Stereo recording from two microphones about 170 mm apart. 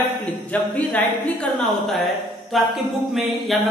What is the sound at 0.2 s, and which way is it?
Speech, 10° left (ahead or behind).